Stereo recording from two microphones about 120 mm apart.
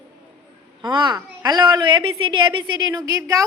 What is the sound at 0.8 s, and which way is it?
A woman's voice, 40° right (ahead or behind).